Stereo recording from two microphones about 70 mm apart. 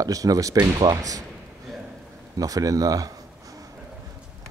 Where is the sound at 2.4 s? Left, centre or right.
Right.